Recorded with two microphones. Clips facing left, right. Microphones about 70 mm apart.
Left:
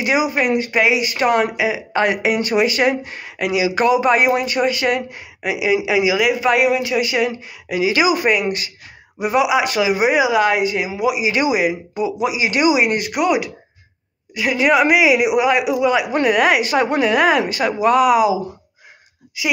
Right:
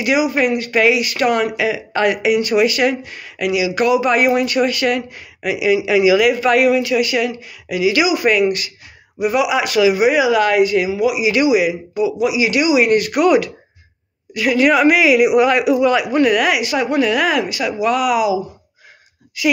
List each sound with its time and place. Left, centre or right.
0.0 s speech: left